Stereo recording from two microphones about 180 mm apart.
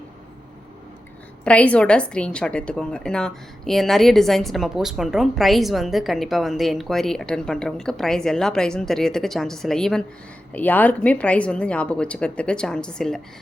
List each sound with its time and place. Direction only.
1.5 s a woman's voice: 5° left (ahead or behind)